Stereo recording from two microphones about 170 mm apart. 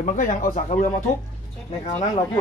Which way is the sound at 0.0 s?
50° left (ahead or behind).